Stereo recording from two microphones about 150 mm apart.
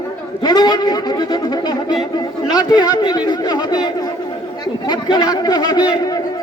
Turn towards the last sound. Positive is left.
turn(degrees=25)  # may be behind; listen again after turning